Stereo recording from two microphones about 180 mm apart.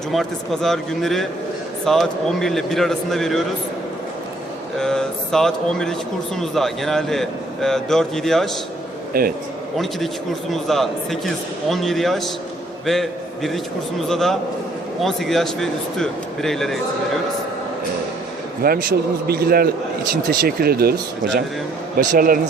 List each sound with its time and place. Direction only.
0.1 s a man's voice: centre (ahead or behind)
4.8 s a man's voice: 5° left (ahead or behind)
9.1 s a man's voice: 55° right (ahead or behind)
9.7 s a man's voice: centre (ahead or behind)
18.6 s a man's voice: 60° right (ahead or behind)
21.9 s speech: 50° right (ahead or behind)